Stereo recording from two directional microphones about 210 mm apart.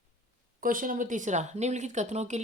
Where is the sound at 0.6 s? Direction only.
40° right (ahead or behind).